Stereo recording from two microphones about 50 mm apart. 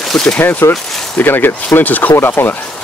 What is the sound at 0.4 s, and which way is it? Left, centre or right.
Speech, left.